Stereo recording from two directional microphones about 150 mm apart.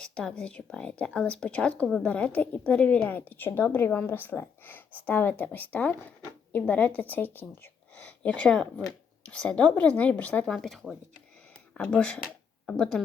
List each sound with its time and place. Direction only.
0.0 s a woman's voice: 5° left (ahead or behind)